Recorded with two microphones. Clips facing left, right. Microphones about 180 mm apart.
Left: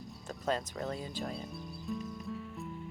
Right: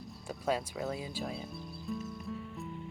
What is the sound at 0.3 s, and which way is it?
Speech, 10° right (ahead or behind).